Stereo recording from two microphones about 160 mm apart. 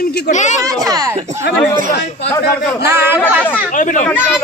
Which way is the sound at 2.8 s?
15° right (ahead or behind).